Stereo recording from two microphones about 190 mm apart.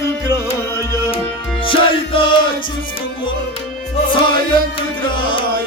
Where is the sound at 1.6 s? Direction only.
25° left (ahead or behind).